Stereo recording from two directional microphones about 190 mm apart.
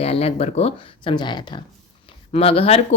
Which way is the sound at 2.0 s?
30° left (ahead or behind).